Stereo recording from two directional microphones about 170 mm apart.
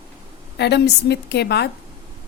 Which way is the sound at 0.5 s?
80° left.